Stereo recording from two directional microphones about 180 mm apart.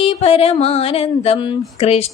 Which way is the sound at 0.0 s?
35° left (ahead or behind).